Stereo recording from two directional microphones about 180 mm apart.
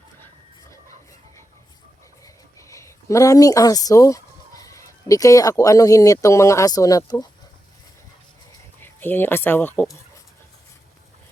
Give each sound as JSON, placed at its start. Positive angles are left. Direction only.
{"t": 2.2, "sound": "speech", "side_deg": 15}
{"t": 8.8, "sound": "speech", "side_deg": 10}